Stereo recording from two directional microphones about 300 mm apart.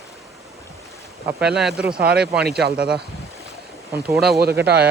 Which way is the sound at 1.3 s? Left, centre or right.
Centre.